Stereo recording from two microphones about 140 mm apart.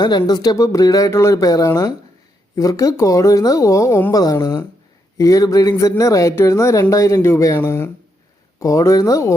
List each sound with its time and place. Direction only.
0.0 s speech: 30° left (ahead or behind)